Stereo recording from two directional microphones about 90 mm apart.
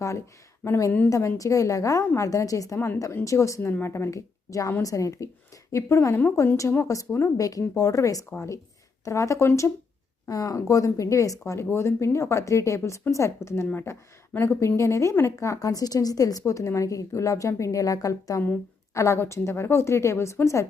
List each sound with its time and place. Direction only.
0.6 s speech: 30° left (ahead or behind)
2.7 s a woman's voice: 25° left (ahead or behind)
3.2 s speech: 35° left (ahead or behind)